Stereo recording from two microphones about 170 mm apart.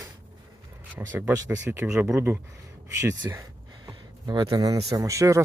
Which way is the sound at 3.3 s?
20° right (ahead or behind).